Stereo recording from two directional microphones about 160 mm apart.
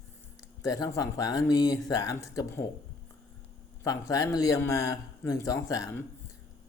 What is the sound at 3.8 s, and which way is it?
A man's voice, 20° left (ahead or behind).